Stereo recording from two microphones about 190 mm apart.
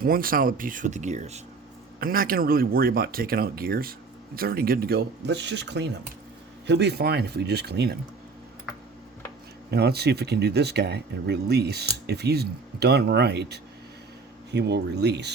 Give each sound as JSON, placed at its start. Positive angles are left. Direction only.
{"t": 0.0, "sound": "speech", "side_deg": -50}
{"t": 2.0, "sound": "speech", "side_deg": -50}
{"t": 9.7, "sound": "speech", "side_deg": -60}